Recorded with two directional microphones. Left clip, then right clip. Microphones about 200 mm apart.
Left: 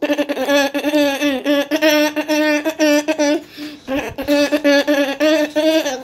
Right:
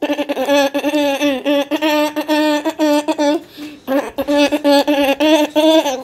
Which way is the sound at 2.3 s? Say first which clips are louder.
Right 1 dB; 10° right (ahead or behind).